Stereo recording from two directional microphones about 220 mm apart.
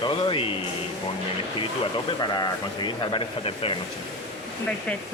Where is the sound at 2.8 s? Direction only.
25° left (ahead or behind).